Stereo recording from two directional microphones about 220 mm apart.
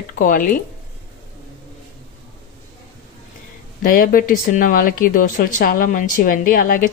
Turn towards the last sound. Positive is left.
turn(degrees=40)  # may be behind; listen again after turning